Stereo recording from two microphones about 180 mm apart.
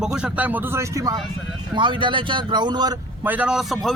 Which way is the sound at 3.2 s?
10° right (ahead or behind).